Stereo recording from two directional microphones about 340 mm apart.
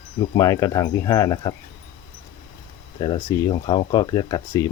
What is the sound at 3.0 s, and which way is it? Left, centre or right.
Cricket, centre.